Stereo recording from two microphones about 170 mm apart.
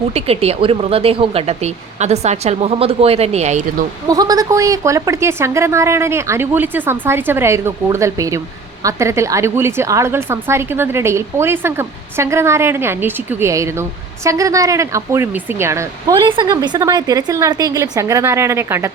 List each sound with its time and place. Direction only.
0.1 s speech: 35° right (ahead or behind)
4.1 s a woman's voice: 20° right (ahead or behind)
16.2 s a woman's voice: 25° right (ahead or behind)